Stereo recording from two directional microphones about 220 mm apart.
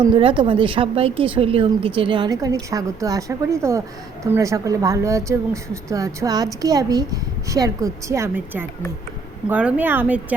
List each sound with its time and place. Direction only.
0.2 s a woman's voice: 25° right (ahead or behind); by 10.3 s 10° right (ahead or behind)